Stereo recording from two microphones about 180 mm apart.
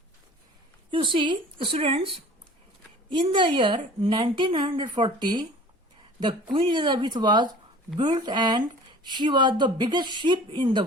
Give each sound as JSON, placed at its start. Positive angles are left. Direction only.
{"t": 0.9, "sound": "speech", "side_deg": -30}